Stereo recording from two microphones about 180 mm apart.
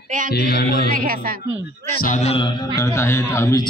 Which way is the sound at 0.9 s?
50° right (ahead or behind).